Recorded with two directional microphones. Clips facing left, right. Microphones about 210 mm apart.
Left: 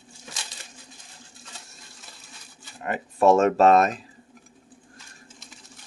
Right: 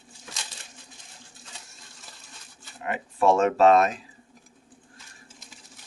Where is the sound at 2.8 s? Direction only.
40° left (ahead or behind).